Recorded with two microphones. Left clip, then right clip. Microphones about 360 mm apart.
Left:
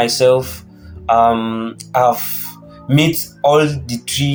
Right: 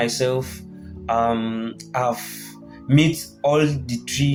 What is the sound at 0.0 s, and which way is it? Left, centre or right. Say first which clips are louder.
Speech: left 9 dB; right.